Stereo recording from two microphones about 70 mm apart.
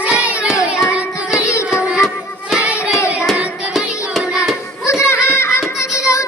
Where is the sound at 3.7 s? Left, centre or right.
Centre.